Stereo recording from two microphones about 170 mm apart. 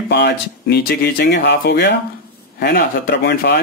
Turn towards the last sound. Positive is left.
turn(degrees=70)  # may be behind; listen again after turning